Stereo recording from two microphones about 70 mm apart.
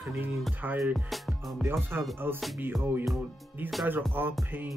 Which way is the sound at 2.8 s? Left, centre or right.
Right.